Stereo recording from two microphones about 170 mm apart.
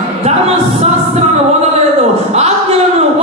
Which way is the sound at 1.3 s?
40° right (ahead or behind).